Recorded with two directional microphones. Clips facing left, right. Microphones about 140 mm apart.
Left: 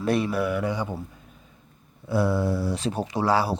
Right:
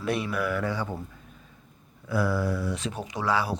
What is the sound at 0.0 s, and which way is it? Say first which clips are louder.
Speech: left 4 dB; 35° left (ahead or behind).